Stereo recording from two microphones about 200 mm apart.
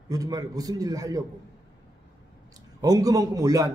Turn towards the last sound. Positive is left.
turn(degrees=-15)  # may be behind; listen again after turning